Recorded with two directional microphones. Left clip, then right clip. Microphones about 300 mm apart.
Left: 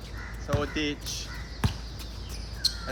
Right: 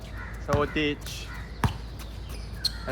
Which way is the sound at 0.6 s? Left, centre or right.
Centre.